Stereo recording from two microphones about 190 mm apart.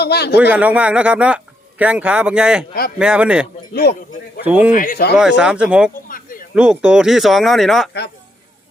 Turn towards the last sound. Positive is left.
turn(degrees=0)  # may be behind; listen again after turning